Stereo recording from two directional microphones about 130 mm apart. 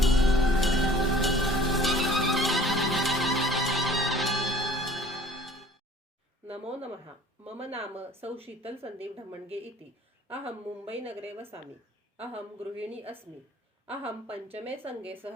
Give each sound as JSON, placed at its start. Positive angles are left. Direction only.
{"t": 0.0, "sound": "music", "side_deg": 0}
{"t": 6.5, "sound": "a sound", "side_deg": -50}
{"t": 7.6, "sound": "a woman's voice", "side_deg": -50}
{"t": 10.9, "sound": "a woman's voice", "side_deg": -15}
{"t": 12.3, "sound": "a woman's voice", "side_deg": -50}
{"t": 14.7, "sound": "a woman's voice", "side_deg": -15}